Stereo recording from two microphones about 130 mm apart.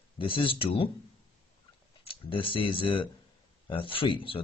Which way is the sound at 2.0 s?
40° left (ahead or behind).